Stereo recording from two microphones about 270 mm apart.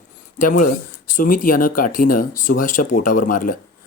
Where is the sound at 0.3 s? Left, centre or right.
Left.